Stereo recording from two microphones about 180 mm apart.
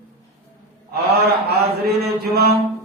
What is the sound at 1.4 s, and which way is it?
Mantra, 60° right (ahead or behind).